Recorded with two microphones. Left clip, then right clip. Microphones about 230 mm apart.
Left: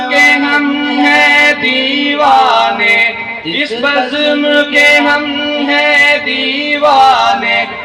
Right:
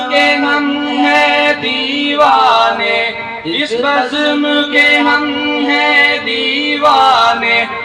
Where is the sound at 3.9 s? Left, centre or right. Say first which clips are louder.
Left 1 dB; left.